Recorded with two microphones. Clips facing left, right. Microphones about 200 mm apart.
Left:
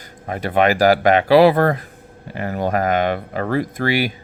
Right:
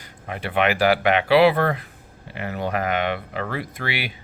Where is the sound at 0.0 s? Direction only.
40° left (ahead or behind).